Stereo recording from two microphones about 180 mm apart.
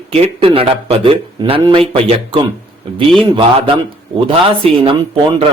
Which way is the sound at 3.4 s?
30° right (ahead or behind).